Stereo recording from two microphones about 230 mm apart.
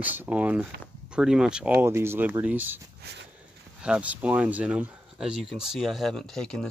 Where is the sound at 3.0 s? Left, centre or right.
Right.